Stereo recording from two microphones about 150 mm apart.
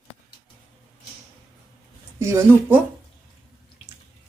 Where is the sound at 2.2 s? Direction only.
15° right (ahead or behind).